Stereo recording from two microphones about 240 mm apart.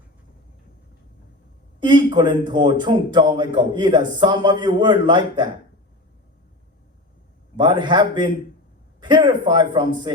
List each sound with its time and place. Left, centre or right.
1.8 s a man's voice: centre
7.5 s a man's voice: centre